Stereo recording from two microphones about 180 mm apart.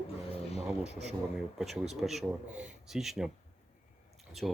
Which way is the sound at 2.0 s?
Centre (ahead or behind).